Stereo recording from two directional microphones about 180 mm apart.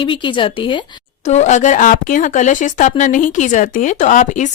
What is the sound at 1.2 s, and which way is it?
Speech, 40° left (ahead or behind).